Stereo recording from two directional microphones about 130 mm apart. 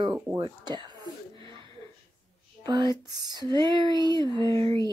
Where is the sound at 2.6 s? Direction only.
30° right (ahead or behind).